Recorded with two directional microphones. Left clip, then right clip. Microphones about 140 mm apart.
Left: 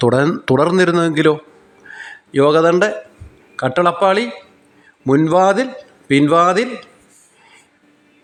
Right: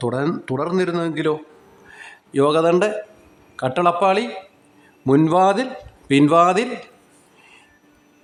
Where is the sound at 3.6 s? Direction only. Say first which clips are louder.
Left 3 dB; 10° left (ahead or behind).